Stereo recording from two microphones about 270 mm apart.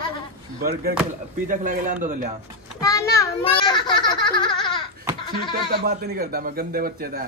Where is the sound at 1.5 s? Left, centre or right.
Right.